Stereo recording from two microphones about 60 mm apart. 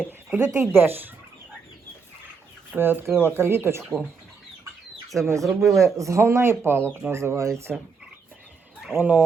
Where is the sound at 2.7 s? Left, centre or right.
Right.